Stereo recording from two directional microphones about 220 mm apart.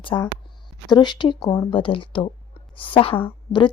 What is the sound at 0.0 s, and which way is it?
A woman's voice, 25° left (ahead or behind).